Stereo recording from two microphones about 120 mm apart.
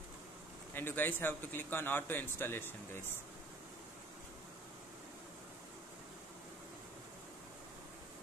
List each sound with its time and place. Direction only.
0.7 s a man's voice: 15° left (ahead or behind)